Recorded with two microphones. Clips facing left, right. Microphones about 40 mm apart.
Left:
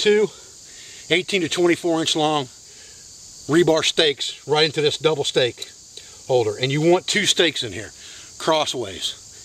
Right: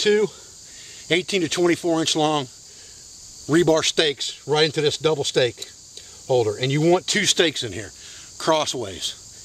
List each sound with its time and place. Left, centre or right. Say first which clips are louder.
0.0 s speech: left 2 dB; centre